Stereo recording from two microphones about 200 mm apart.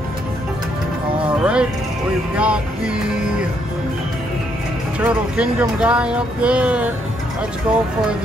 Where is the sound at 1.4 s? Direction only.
5° right (ahead or behind).